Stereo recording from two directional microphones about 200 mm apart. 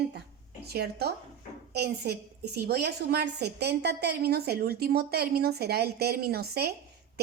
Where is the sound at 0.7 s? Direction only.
55° right (ahead or behind).